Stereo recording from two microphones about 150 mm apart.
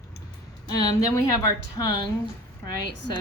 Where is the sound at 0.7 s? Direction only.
25° left (ahead or behind).